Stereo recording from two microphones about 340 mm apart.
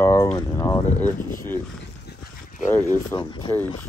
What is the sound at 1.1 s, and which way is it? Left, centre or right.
Speech, left.